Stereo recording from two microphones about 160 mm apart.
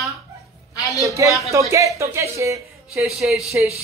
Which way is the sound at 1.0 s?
20° right (ahead or behind).